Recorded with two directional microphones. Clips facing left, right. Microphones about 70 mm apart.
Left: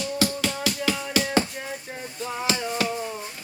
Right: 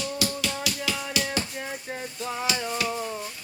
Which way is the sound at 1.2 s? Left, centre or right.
Left.